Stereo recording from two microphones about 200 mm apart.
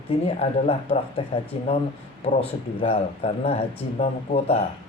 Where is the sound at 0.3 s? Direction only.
30° left (ahead or behind).